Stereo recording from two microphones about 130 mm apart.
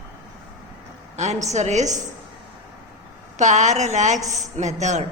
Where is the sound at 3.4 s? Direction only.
65° right (ahead or behind).